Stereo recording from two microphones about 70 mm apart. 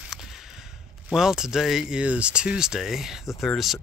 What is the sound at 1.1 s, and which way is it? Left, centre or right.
Speech, centre.